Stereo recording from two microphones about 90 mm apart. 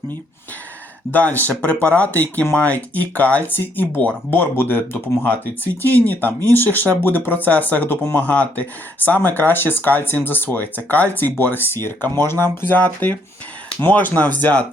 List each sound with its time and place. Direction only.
1.1 s speech: 20° left (ahead or behind)
5.8 s speech: 20° left (ahead or behind)